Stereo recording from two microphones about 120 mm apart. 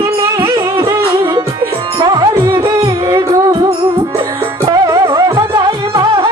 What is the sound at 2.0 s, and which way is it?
Music, 35° right (ahead or behind).